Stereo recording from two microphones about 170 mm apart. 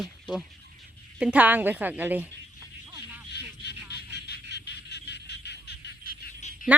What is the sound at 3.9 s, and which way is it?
Goose, 75° left (ahead or behind).